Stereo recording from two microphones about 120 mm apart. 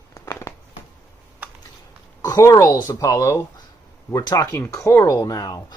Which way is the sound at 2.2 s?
30° left (ahead or behind).